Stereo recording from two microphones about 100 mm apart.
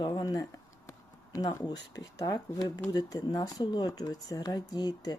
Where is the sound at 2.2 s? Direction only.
40° left (ahead or behind).